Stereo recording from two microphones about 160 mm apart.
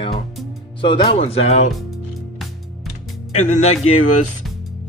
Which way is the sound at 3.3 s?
45° left (ahead or behind).